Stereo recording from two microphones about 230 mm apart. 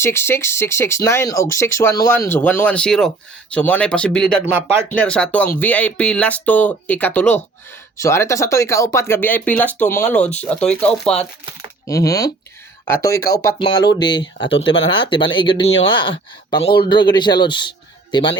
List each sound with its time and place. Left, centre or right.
0.0 s speech: centre